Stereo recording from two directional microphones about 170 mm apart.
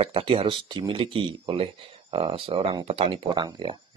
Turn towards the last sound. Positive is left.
turn(degrees=-25)  # may be behind; listen again after turning